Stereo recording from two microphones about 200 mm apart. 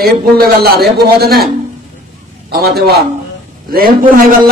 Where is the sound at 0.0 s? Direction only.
50° right (ahead or behind).